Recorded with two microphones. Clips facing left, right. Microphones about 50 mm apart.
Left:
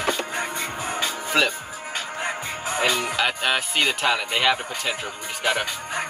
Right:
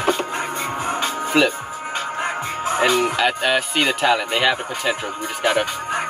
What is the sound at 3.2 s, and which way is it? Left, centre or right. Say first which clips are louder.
Speech: right 4 dB; centre.